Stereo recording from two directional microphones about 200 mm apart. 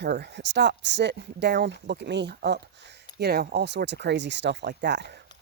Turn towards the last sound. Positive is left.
turn(degrees=-60)  # may be behind; listen again after turning